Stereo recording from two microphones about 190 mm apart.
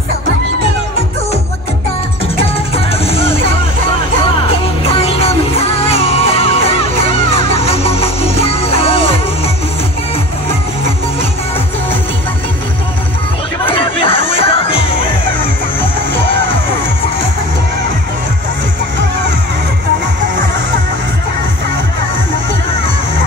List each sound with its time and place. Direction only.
2.7 s music: 30° left (ahead or behind)
4.8 s music: 30° left (ahead or behind)
7.7 s music: 30° left (ahead or behind)
13.7 s chatter: 25° left (ahead or behind)
14.3 s music: 30° left (ahead or behind)